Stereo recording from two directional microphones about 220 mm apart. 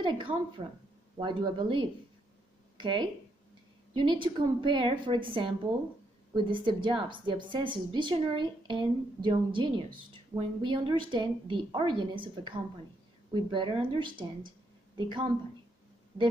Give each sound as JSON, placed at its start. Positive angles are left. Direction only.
{"t": 0.0, "sound": "a woman's voice", "side_deg": -20}